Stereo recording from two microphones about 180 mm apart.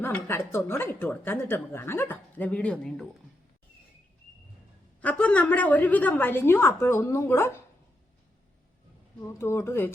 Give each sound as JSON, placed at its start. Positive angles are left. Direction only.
{"t": 0.0, "sound": "a woman's voice", "side_deg": 10}
{"t": 4.9, "sound": "a woman's voice", "side_deg": 10}
{"t": 9.4, "sound": "a woman's voice", "side_deg": 15}